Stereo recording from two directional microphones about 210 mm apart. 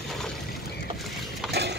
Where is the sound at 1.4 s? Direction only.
55° right (ahead or behind).